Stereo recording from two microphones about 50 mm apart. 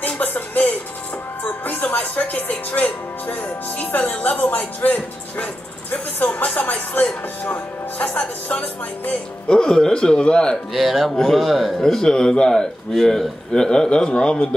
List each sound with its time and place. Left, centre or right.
0.0 s music: left
1.4 s speech: left
9.5 s a man's voice: centre
10.7 s speech: centre
12.0 s a man's voice: centre